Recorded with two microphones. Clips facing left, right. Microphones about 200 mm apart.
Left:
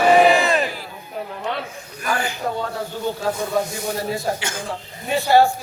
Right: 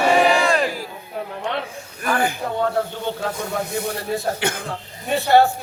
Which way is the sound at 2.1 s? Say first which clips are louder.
Right 3 dB; 55° right (ahead or behind).